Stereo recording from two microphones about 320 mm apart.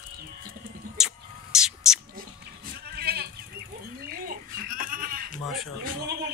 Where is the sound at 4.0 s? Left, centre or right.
Right.